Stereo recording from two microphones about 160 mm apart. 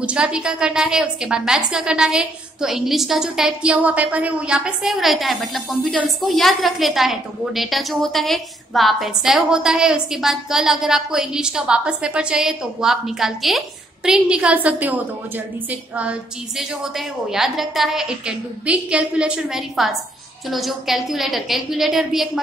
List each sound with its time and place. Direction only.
0.0 s a woman's voice: 5° right (ahead or behind)